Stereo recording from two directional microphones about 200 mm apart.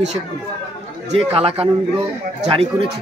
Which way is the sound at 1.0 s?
30° right (ahead or behind).